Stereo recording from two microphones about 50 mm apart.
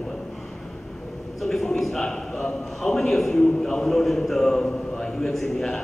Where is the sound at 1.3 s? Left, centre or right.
Centre.